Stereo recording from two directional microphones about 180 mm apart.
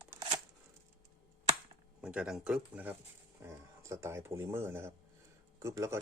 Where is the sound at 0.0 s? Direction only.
15° right (ahead or behind).